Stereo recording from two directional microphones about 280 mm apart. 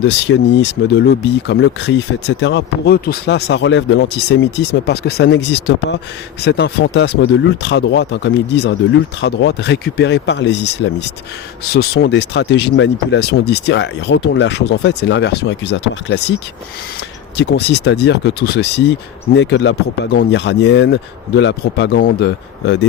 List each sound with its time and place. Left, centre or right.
0.0 s speech: left
17.3 s speech: left